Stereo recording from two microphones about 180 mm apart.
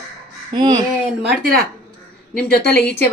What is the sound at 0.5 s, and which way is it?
Speech, 25° right (ahead or behind).